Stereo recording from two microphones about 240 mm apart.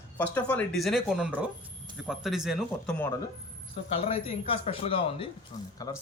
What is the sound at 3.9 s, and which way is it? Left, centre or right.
Speech, left.